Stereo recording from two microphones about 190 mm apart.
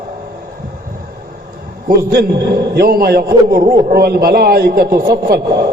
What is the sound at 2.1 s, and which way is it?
A man's voice, 55° right (ahead or behind).